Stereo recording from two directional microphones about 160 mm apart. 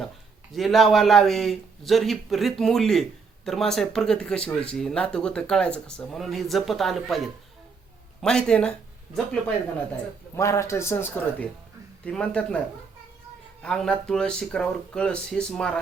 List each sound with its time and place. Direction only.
0.5 s speech: centre (ahead or behind)
10.3 s a man's voice: 20° left (ahead or behind)